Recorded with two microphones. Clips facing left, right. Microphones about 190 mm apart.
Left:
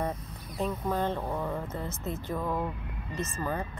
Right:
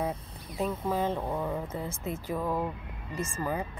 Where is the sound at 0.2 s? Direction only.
30° right (ahead or behind).